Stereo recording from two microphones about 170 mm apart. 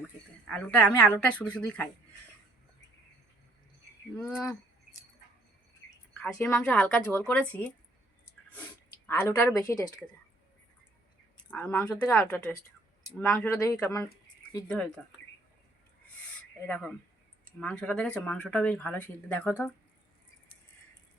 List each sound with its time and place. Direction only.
0.4 s speech: 5° left (ahead or behind)
4.2 s speech: 5° left (ahead or behind)
6.1 s speech: 5° left (ahead or behind)
11.5 s speech: 10° left (ahead or behind)
16.6 s speech: 10° left (ahead or behind)